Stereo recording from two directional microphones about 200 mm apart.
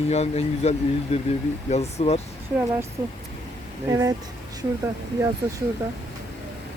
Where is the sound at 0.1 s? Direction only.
35° left (ahead or behind).